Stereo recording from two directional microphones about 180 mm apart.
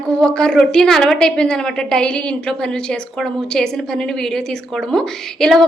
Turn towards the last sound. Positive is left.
turn(degrees=0)  # may be behind; listen again after turning